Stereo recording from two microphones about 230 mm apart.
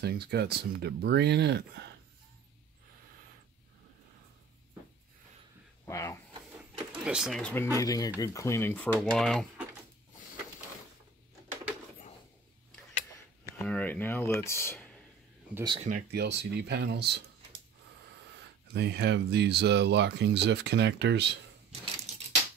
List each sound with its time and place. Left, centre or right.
0.0 s speech: right
5.9 s speech: centre
7.1 s speech: centre
7.8 s speech: centre
13.5 s speech: centre
15.5 s speech: centre
15.9 s speech: right
18.7 s speech: right